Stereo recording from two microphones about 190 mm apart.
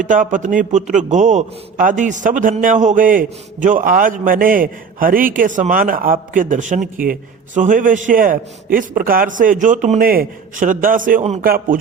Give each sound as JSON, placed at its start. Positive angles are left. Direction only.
{"t": 0.0, "sound": "a man's voice", "side_deg": -45}
{"t": 11.4, "sound": "a man's voice", "side_deg": -50}